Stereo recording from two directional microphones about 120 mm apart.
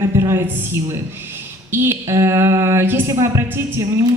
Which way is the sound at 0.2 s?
25° right (ahead or behind).